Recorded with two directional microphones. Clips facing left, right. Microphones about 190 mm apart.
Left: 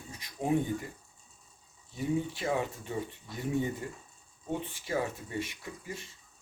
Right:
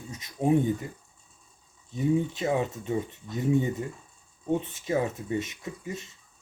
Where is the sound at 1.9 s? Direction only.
20° right (ahead or behind).